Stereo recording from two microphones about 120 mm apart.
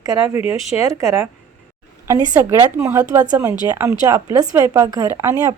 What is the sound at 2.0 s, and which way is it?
A woman's voice, 25° right (ahead or behind).